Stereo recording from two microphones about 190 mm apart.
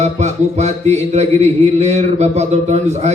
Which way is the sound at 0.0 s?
35° right (ahead or behind).